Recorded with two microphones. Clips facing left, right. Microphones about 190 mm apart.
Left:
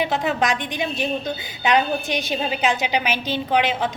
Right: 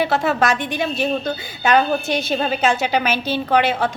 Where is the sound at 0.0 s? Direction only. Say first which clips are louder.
Right 3 dB; 15° left (ahead or behind).